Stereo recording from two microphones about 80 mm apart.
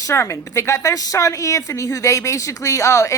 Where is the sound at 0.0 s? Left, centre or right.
Left.